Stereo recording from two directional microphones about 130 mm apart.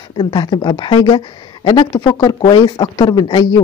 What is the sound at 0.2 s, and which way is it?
Speech, 35° left (ahead or behind).